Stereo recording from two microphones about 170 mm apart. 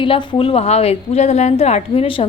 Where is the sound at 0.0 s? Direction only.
30° left (ahead or behind).